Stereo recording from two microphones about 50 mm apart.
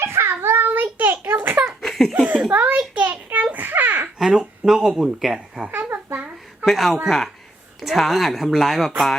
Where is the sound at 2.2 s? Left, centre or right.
Right.